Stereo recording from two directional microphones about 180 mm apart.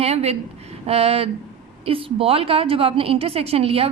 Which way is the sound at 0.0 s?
35° right (ahead or behind).